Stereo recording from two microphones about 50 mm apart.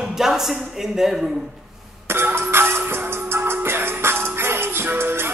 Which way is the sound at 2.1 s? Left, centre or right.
Right.